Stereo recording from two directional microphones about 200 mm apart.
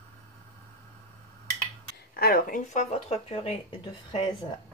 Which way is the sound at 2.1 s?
45° left (ahead or behind).